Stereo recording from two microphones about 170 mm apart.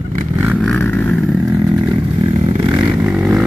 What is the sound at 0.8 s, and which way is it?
Vehicle, 10° left (ahead or behind).